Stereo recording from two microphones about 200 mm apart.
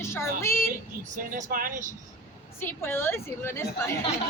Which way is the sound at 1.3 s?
45° right (ahead or behind).